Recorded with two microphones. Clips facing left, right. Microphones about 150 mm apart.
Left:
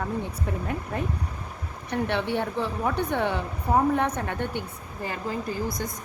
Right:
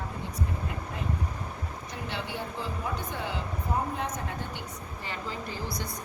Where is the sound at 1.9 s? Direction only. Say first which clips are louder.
Left 11 dB; 65° left (ahead or behind).